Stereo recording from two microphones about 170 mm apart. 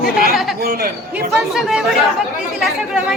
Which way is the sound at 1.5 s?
Centre (ahead or behind).